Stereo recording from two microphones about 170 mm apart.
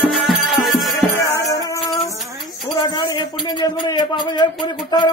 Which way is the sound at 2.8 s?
25° left (ahead or behind).